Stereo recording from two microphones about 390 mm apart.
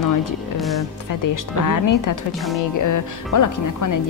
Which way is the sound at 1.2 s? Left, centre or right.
Left.